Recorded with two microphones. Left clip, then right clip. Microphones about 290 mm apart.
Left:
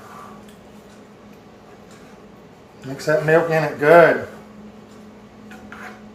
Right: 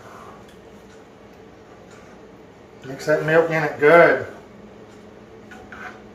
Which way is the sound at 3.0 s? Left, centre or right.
Left.